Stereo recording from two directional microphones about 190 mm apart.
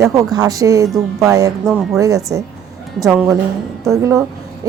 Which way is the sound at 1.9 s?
15° right (ahead or behind).